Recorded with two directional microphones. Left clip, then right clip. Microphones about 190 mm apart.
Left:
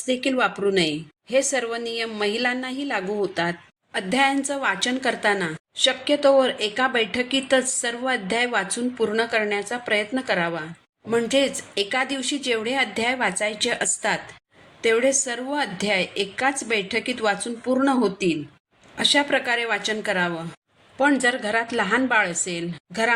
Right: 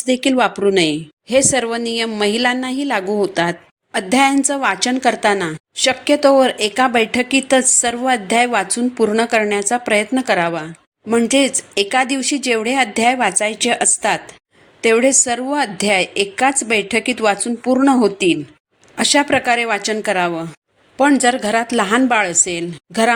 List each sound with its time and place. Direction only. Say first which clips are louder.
0.0 s a woman's voice: right 7 dB; 40° right (ahead or behind)